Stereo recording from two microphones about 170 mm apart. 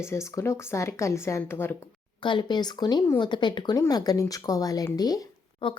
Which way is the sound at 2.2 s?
25° left (ahead or behind).